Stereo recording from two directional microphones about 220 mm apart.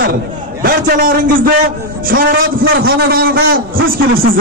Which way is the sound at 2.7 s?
45° right (ahead or behind).